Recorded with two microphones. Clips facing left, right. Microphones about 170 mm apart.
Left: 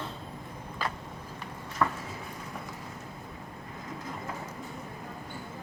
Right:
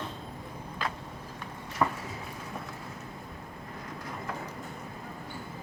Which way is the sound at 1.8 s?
20° right (ahead or behind).